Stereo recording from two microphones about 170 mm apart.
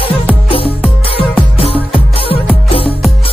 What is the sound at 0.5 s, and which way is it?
Music, 35° left (ahead or behind).